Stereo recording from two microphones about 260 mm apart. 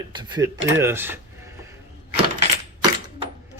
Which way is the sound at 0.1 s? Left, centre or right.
Centre.